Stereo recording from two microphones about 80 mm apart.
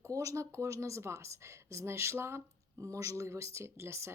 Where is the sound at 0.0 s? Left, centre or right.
Right.